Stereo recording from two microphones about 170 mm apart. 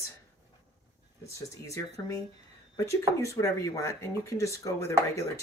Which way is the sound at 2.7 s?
15° left (ahead or behind).